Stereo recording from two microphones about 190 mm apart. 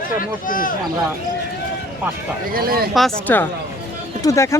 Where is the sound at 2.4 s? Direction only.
50° right (ahead or behind).